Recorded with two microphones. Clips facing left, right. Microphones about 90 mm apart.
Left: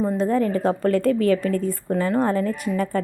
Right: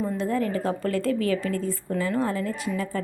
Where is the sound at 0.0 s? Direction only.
35° left (ahead or behind).